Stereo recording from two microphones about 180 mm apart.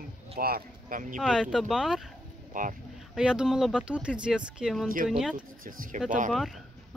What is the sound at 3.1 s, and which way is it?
Speech, 5° right (ahead or behind).